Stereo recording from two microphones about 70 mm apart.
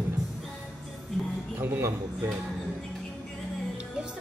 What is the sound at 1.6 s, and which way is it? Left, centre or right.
Speech, right.